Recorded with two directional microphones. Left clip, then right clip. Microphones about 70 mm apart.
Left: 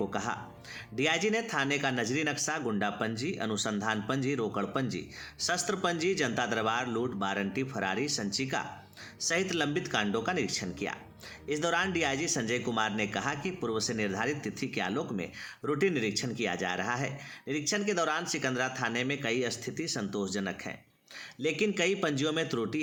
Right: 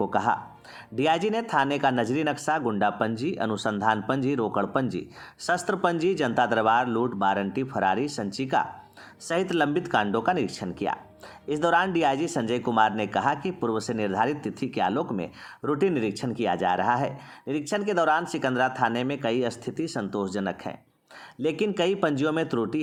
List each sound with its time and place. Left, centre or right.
0.0 s speech: right
13.7 s speech: right